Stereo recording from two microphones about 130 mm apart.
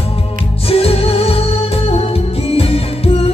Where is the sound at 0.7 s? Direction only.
50° left (ahead or behind).